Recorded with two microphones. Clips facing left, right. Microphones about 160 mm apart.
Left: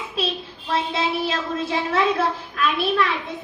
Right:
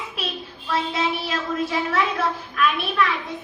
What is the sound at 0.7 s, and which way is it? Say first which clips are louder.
Child singing: left 1 dB; 30° left (ahead or behind).